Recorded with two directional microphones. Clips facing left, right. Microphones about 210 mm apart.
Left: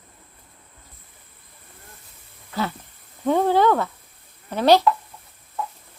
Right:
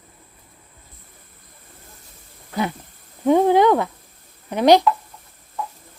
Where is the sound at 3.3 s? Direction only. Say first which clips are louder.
Right 4 dB; 15° right (ahead or behind).